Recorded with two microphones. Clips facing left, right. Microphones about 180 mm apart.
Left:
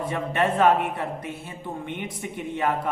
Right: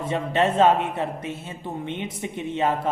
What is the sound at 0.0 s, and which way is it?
A man's voice, 25° right (ahead or behind).